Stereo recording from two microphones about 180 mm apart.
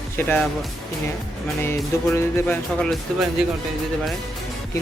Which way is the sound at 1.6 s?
15° left (ahead or behind).